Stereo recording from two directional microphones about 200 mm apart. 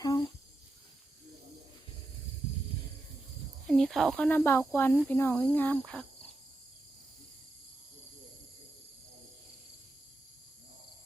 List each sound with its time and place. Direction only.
0.0 s cricket: 20° left (ahead or behind)
3.7 s speech: centre (ahead or behind)